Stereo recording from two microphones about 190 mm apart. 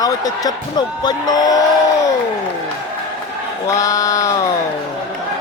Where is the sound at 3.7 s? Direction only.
20° left (ahead or behind).